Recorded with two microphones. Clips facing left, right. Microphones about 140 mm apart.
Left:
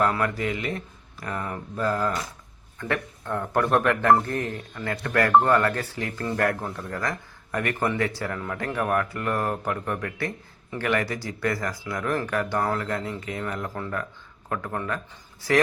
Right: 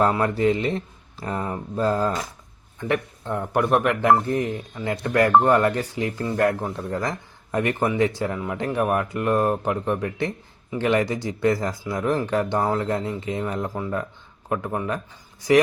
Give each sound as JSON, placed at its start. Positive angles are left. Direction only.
{"t": 0.0, "sound": "a man's voice", "side_deg": -30}